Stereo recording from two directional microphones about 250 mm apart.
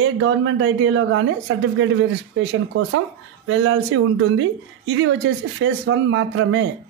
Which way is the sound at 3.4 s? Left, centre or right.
Right.